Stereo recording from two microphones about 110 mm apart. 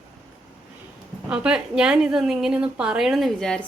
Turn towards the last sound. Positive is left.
turn(degrees=5)  # may be behind; listen again after turning